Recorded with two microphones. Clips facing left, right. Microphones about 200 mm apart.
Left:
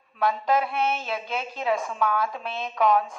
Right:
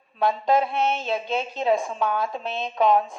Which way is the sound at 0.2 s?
25° right (ahead or behind).